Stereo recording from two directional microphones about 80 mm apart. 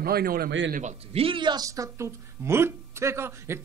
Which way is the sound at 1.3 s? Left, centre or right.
Right.